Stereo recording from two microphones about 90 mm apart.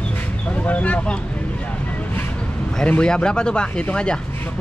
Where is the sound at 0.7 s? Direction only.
15° left (ahead or behind).